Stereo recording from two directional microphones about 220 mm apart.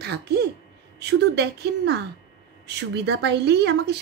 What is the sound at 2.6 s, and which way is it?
Speech, 50° right (ahead or behind).